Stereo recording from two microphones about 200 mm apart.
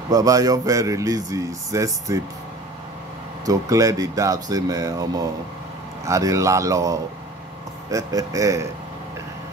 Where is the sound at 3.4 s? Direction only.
15° right (ahead or behind).